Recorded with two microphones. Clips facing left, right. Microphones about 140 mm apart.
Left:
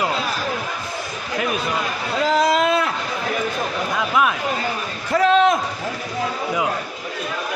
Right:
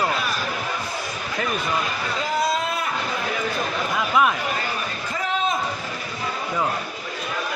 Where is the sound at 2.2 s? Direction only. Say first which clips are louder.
Left 7 dB; 90° left.